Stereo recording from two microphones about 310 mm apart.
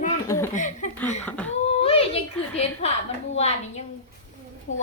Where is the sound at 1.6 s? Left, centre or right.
Centre.